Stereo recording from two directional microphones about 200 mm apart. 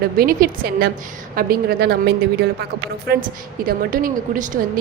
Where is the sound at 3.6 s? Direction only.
45° right (ahead or behind).